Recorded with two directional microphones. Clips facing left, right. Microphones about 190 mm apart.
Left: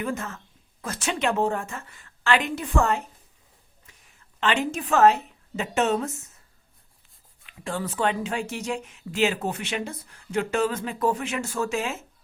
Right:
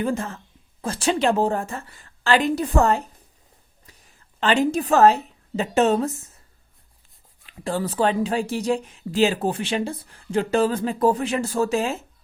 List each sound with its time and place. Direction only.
0.0 s a woman's voice: 30° right (ahead or behind)
3.9 s a sound: 35° right (ahead or behind)
4.4 s a woman's voice: 35° right (ahead or behind)
7.4 s a woman's voice: 35° right (ahead or behind)